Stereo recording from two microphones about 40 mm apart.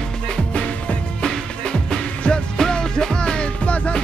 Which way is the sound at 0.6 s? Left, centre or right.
Left.